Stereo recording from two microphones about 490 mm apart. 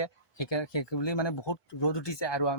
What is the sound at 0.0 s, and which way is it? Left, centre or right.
Speech, left.